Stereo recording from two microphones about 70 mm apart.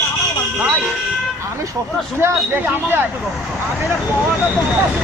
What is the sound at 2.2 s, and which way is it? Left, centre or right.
Speech, right.